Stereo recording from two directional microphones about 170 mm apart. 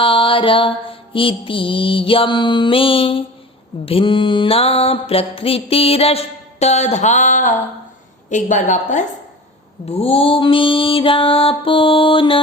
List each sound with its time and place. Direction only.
0.0 s mantra: 30° left (ahead or behind); by 7.5 s 45° left (ahead or behind)
8.3 s a woman's voice: 45° left (ahead or behind)
9.8 s mantra: 35° left (ahead or behind)